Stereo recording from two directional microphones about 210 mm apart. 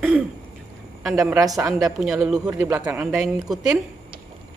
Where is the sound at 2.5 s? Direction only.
15° right (ahead or behind).